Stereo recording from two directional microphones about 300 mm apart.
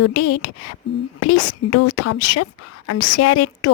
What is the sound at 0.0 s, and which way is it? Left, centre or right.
A woman's voice, left.